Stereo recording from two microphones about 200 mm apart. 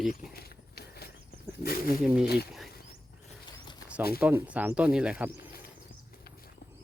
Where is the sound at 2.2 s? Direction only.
50° left (ahead or behind).